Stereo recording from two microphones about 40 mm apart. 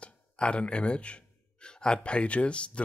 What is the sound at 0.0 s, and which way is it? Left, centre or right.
Speech, left.